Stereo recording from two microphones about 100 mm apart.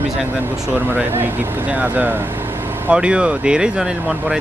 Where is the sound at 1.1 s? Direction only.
20° right (ahead or behind).